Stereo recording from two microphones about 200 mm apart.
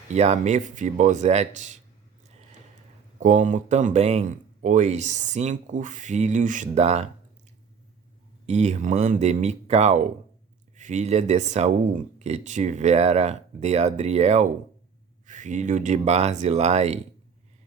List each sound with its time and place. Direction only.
0.1 s speech: 35° right (ahead or behind)
3.2 s speech: 40° right (ahead or behind)
8.4 s speech: 35° right (ahead or behind)